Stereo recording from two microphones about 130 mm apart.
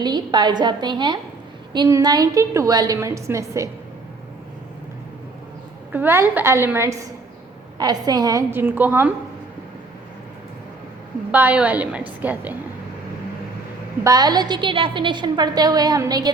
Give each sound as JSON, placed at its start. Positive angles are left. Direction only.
{"t": 0.0, "sound": "a woman's voice", "side_deg": -35}
{"t": 5.9, "sound": "a woman's voice", "side_deg": -15}
{"t": 7.8, "sound": "a woman's voice", "side_deg": -30}
{"t": 8.4, "sound": "a woman's voice", "side_deg": -15}
{"t": 11.3, "sound": "a woman's voice", "side_deg": -10}
{"t": 14.0, "sound": "a woman's voice", "side_deg": -30}